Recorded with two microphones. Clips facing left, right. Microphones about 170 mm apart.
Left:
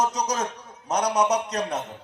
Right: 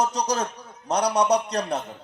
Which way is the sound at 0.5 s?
30° right (ahead or behind).